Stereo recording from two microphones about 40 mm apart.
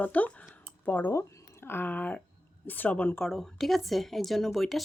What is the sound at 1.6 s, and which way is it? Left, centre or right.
Speech, left.